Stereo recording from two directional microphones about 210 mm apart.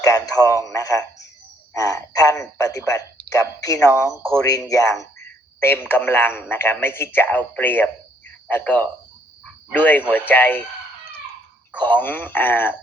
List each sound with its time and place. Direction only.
0.4 s speech: 15° left (ahead or behind)
11.8 s speech: 10° left (ahead or behind)